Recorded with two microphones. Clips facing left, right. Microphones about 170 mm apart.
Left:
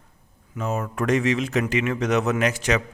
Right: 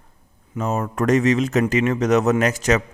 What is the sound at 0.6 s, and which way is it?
A man's voice, 40° right (ahead or behind).